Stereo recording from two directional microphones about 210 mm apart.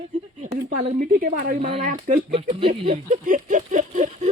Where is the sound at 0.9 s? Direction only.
40° right (ahead or behind).